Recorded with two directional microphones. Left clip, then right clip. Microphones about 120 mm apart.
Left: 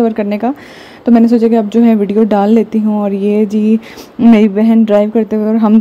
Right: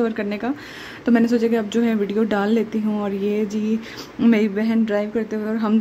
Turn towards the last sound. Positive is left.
turn(degrees=50)  # may be behind; listen again after turning